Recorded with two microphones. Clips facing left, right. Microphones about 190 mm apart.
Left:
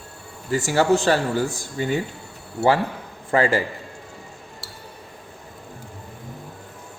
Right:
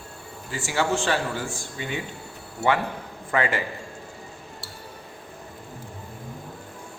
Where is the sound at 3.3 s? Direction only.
30° left (ahead or behind).